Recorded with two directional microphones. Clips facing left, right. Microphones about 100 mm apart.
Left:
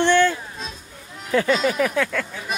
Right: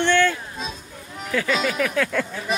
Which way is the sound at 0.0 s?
15° left (ahead or behind).